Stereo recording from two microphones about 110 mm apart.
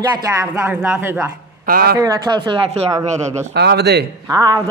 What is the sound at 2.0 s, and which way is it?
Speech, 40° right (ahead or behind).